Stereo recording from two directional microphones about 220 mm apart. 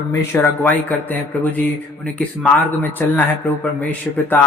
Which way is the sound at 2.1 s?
10° left (ahead or behind).